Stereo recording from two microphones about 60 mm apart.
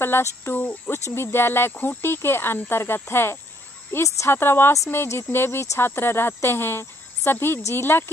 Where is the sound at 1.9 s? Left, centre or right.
Left.